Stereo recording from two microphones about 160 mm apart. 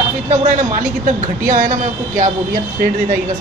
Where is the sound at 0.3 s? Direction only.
45° right (ahead or behind).